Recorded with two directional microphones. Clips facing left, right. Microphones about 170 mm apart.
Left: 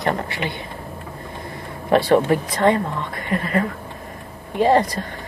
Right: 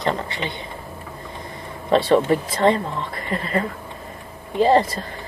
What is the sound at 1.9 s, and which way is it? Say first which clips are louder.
Speech: left 1 dB; 25° right (ahead or behind).